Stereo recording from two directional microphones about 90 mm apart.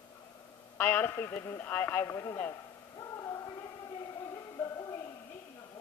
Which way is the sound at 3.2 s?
35° left (ahead or behind).